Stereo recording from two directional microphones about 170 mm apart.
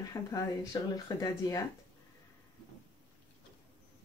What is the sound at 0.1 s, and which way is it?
Speech, 20° left (ahead or behind).